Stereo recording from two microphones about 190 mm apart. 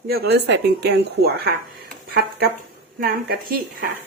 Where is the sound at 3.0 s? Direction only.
50° right (ahead or behind).